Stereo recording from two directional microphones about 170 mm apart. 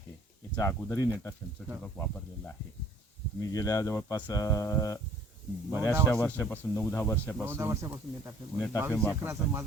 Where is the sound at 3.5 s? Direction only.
20° left (ahead or behind).